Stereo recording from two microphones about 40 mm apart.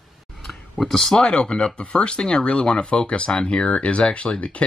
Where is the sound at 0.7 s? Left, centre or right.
Centre.